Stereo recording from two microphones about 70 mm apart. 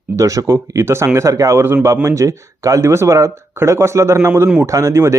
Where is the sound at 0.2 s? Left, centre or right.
Right.